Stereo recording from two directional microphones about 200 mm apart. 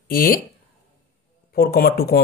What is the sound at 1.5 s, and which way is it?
Speech, 50° left (ahead or behind).